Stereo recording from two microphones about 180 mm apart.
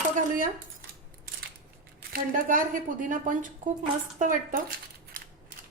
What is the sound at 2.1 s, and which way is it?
Speech, 50° right (ahead or behind).